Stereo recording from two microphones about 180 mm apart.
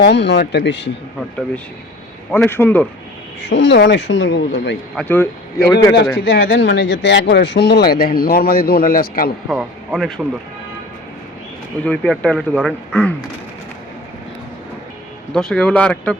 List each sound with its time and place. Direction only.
0.0 s speech: 75° left (ahead or behind)
2.3 s speech: 10° left (ahead or behind)
3.4 s speech: 80° left
4.9 s speech: 10° left (ahead or behind)
5.7 s a man's voice: 20° left (ahead or behind)
6.1 s speech: 60° left (ahead or behind)
9.5 s speech: centre (ahead or behind)
11.9 s speech: 5° left (ahead or behind)
15.3 s speech: 5° left (ahead or behind)